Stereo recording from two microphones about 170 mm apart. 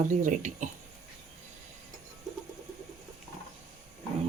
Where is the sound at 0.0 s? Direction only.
50° right (ahead or behind).